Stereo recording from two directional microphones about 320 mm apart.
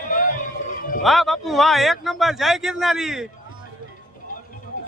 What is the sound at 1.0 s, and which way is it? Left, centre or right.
Speech, centre.